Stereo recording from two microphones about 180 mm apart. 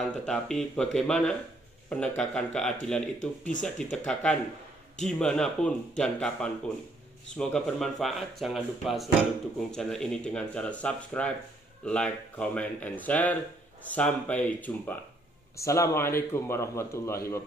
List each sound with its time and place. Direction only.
0.0 s speech: centre (ahead or behind)
3.2 s speech: 45° left (ahead or behind)
3.6 s a man's voice: 5° left (ahead or behind)